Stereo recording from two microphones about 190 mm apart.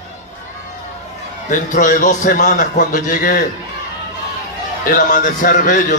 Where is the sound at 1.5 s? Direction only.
40° left (ahead or behind).